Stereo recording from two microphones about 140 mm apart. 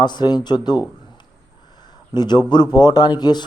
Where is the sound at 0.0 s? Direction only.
30° left (ahead or behind).